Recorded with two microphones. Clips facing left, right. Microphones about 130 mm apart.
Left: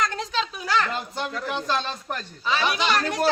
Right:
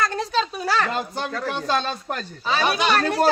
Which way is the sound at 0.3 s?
35° right (ahead or behind).